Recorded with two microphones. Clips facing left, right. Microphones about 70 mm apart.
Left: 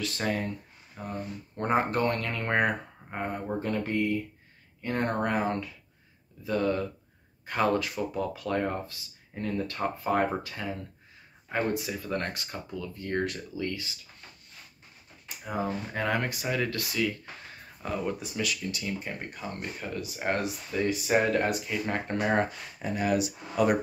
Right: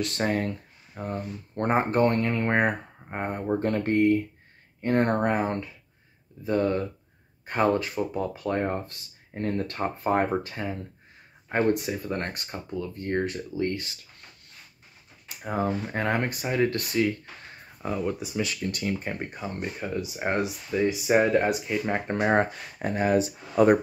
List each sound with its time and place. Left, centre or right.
1.0 s speech: right
1.7 s speech: right
2.2 s speech: right
2.5 s speech: right
3.5 s speech: right
8.8 s speech: right
11.8 s speech: right
15.4 s speech: right
17.8 s speech: centre
18.7 s speech: right
19.3 s speech: centre